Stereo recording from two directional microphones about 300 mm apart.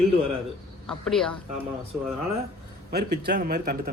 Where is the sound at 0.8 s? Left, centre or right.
Centre.